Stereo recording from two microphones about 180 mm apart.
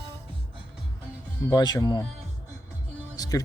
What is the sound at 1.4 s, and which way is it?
Speech, 20° left (ahead or behind).